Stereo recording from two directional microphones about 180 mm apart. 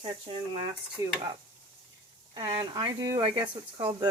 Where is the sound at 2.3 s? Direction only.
20° right (ahead or behind).